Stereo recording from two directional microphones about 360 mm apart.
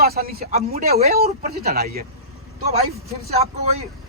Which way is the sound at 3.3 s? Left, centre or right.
Centre.